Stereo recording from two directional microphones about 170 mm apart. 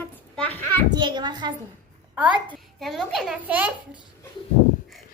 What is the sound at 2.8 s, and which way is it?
Speech, centre (ahead or behind).